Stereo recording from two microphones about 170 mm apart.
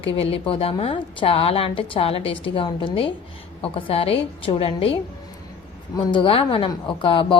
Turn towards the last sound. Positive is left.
turn(degrees=30)  # may be behind; listen again after turning